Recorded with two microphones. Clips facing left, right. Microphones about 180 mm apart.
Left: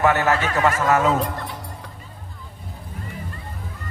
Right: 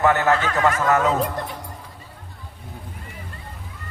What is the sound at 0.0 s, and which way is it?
Speech, 20° left (ahead or behind).